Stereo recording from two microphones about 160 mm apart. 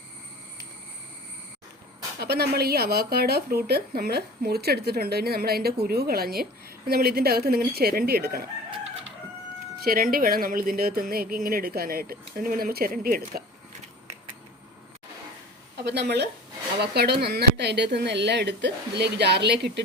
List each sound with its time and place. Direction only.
2.1 s speech: 80° right
9.8 s speech: 65° right (ahead or behind)
15.8 s a woman's voice: 90° right